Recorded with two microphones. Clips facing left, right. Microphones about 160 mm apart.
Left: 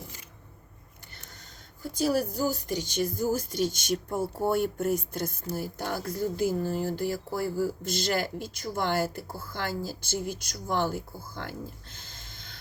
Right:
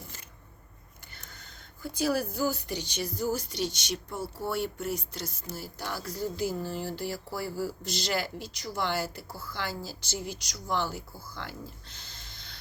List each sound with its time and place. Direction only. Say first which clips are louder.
1.3 s speech: left 1 dB; 40° left (ahead or behind)